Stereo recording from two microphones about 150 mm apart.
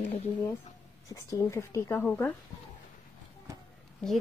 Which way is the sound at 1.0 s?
20° left (ahead or behind).